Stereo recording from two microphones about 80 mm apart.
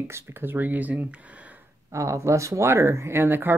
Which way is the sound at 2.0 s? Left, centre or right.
Right.